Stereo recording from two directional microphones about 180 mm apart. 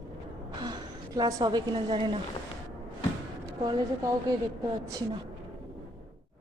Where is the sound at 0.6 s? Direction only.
20° right (ahead or behind).